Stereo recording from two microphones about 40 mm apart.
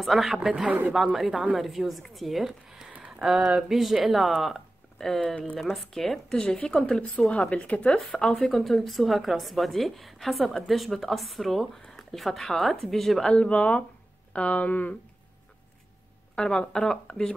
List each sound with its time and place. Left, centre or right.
0.0 s a woman's voice: centre
1.6 s a woman's voice: centre
3.1 s a sound: centre
3.6 s a woman's voice: centre
4.3 s a sound: centre
5.6 s a woman's voice: centre; by 7.9 s left
8.1 s speech: centre
8.4 s a woman's voice: centre
13.2 s speech: left
16.3 s speech: centre